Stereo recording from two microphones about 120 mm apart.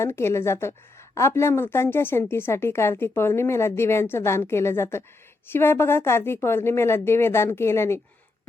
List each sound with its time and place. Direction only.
0.0 s a woman's voice: 20° left (ahead or behind)